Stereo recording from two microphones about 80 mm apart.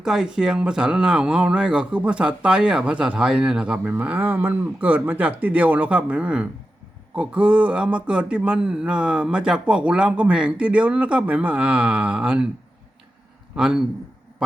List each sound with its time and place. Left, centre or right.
0.0 s speech: centre
13.6 s speech: centre